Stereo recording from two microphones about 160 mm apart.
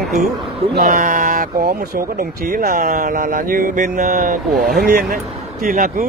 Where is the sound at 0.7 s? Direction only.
55° right (ahead or behind).